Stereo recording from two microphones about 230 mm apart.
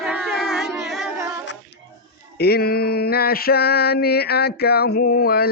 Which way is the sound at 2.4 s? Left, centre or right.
Left.